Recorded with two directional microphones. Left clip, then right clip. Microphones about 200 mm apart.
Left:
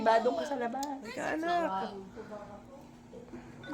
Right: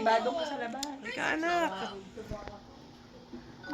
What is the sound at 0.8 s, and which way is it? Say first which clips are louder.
A woman's voice: right 2 dB; 10° left (ahead or behind).